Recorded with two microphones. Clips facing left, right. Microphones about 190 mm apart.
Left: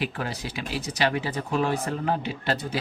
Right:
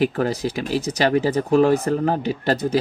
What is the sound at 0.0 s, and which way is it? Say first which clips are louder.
Speech: right 10 dB; 40° right (ahead or behind).